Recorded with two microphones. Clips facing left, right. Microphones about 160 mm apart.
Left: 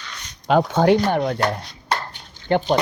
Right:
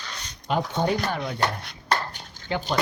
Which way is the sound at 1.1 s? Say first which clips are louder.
Left 8 dB; 55° left (ahead or behind).